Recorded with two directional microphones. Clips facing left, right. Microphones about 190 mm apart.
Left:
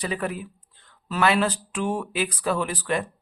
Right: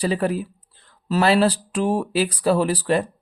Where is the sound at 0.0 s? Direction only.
35° right (ahead or behind).